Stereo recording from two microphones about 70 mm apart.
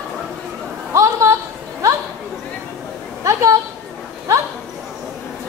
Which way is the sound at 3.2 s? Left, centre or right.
Right.